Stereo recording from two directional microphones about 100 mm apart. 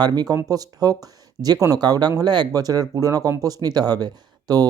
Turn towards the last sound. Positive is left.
turn(degrees=-40)  # may be behind; listen again after turning